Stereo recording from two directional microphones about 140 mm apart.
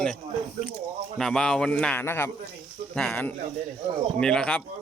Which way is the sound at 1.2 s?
5° left (ahead or behind).